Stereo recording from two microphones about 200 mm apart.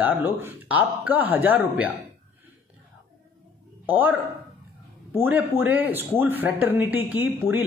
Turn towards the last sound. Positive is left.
turn(degrees=-10)  # may be behind; listen again after turning